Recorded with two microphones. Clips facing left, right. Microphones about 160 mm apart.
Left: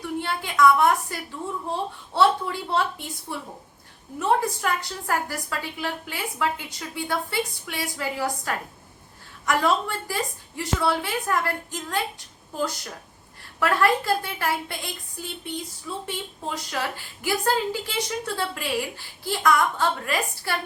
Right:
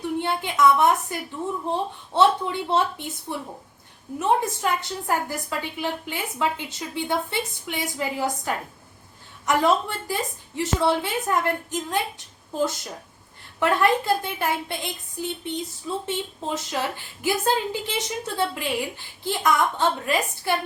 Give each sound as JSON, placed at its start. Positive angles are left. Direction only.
{"t": 0.2, "sound": "a woman's voice", "side_deg": -20}
{"t": 15.9, "sound": "a woman's voice", "side_deg": -25}